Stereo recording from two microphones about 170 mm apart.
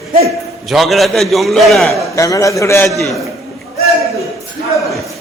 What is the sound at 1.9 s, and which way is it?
A man's voice, 20° left (ahead or behind).